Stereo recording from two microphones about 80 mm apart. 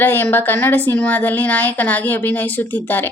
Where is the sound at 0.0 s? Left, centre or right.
Left.